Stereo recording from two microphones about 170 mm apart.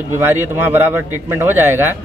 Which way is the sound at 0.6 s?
15° right (ahead or behind).